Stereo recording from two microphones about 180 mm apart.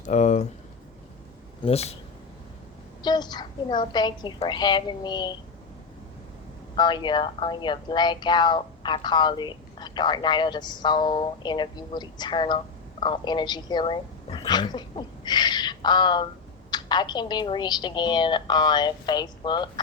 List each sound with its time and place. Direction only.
0.0 s speech: 40° left (ahead or behind)
1.6 s speech: 35° left (ahead or behind)
3.0 s speech: 25° left (ahead or behind)
6.7 s a woman's voice: 25° left (ahead or behind)